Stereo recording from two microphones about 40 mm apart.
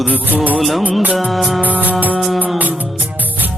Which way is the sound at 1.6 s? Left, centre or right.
Right.